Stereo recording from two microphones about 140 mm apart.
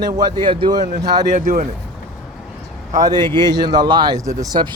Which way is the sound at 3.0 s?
30° right (ahead or behind).